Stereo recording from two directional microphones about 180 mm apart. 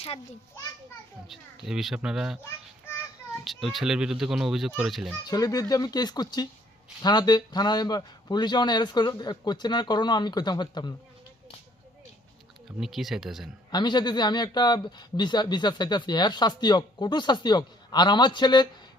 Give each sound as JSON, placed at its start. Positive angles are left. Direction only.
{"t": 1.3, "sound": "a child's voice", "side_deg": 0}
{"t": 2.4, "sound": "a sound", "side_deg": 15}
{"t": 3.4, "sound": "a child's voice", "side_deg": 0}
{"t": 5.2, "sound": "speech", "side_deg": 20}
{"t": 12.6, "sound": "a child's voice", "side_deg": 0}
{"t": 13.7, "sound": "speech", "side_deg": 25}